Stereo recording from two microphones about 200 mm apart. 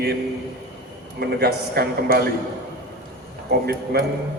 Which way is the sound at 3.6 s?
50° right (ahead or behind).